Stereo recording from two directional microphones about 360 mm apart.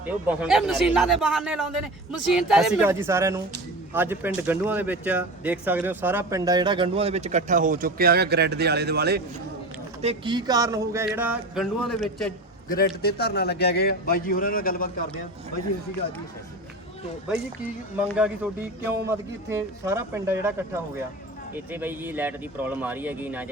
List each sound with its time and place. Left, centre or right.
0.0 s speech: centre; by 9.2 s right
10.0 s speech: centre
12.6 s a man's voice: left
18.2 s speech: centre
21.5 s speech: centre